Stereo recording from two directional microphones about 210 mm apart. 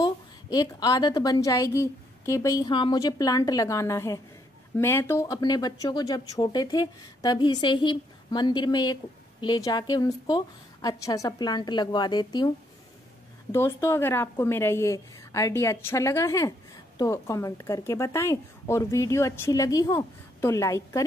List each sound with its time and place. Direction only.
0.0 s a woman's voice: 20° left (ahead or behind)